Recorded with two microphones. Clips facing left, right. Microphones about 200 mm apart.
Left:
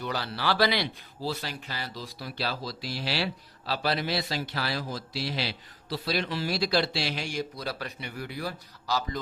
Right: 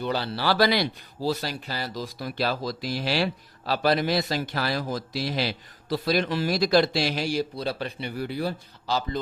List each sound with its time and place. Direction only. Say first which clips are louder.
0.0 s a man's voice: right 4 dB; 30° right (ahead or behind)